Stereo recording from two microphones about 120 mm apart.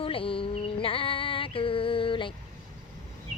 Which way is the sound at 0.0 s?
50° left (ahead or behind).